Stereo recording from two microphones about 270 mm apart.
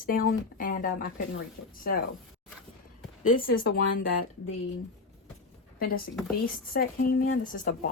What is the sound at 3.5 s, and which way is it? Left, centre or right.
Speech, left.